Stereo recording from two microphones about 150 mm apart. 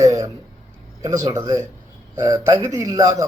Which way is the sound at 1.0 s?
25° right (ahead or behind).